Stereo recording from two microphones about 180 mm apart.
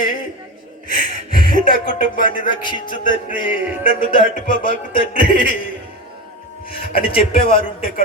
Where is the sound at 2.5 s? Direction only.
25° left (ahead or behind).